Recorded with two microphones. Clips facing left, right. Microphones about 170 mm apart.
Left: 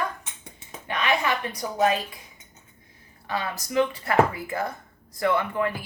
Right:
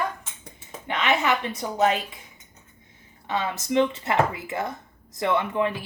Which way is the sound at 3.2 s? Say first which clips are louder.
Right 3 dB; 25° right (ahead or behind).